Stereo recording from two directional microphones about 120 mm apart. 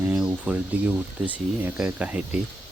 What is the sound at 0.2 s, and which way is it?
Speech, 10° right (ahead or behind).